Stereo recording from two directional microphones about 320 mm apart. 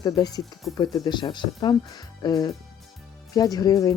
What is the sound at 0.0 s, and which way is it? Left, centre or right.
Speech, centre.